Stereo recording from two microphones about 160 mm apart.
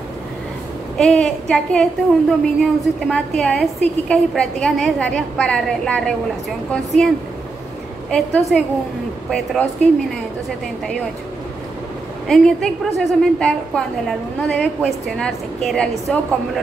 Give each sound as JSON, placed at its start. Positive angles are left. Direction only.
{"t": 0.9, "sound": "a woman's voice", "side_deg": 5}
{"t": 8.1, "sound": "a woman's voice", "side_deg": 5}
{"t": 12.3, "sound": "a woman's voice", "side_deg": 5}